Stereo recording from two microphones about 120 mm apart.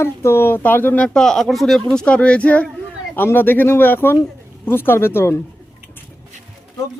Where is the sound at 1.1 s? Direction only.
5° left (ahead or behind); by 5.4 s 20° left (ahead or behind).